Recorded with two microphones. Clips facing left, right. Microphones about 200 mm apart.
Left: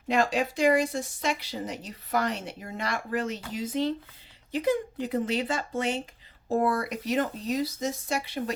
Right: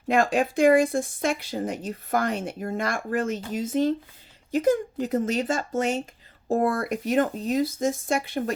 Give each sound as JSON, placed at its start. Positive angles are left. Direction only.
{"t": 0.1, "sound": "speech", "side_deg": -50}